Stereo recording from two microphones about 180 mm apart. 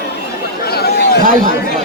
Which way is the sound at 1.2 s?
50° right (ahead or behind).